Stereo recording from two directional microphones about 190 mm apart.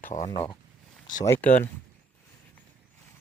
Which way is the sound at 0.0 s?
40° left (ahead or behind).